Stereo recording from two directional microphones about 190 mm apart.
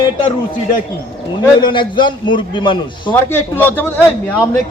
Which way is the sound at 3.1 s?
10° left (ahead or behind).